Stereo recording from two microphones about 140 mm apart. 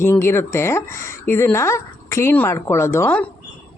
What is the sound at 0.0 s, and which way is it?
Speech, 15° left (ahead or behind).